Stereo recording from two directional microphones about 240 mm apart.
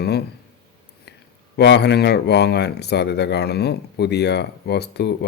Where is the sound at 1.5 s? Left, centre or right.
Left.